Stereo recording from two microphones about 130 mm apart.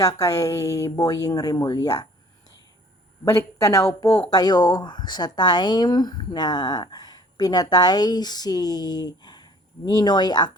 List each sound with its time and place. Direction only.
0.0 s speech: 25° left (ahead or behind)
3.2 s speech: 25° left (ahead or behind)